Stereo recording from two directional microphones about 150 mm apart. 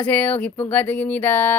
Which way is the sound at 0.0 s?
10° left (ahead or behind).